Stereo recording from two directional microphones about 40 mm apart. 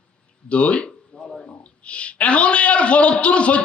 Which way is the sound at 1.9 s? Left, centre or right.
Left.